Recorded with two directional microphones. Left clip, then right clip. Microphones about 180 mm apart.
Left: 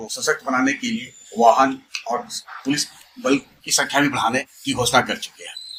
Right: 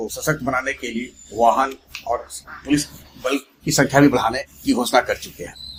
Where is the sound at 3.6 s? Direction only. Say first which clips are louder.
Right 4 dB; 40° right (ahead or behind).